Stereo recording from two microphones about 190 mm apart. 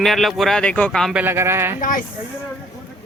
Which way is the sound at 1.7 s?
45° left (ahead or behind).